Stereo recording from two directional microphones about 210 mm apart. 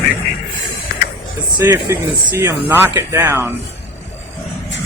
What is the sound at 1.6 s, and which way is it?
Speech, 15° right (ahead or behind).